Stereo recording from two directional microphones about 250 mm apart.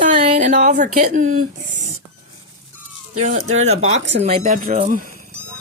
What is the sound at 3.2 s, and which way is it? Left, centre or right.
Speech, right.